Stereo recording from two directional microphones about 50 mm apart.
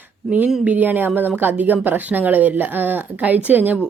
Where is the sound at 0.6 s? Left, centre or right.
Right.